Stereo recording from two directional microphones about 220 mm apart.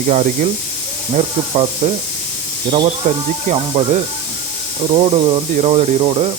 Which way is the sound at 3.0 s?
35° right (ahead or behind).